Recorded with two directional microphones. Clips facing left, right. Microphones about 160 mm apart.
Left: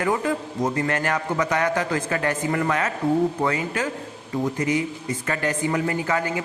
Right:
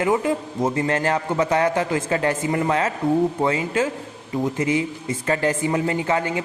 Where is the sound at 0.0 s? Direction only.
20° right (ahead or behind).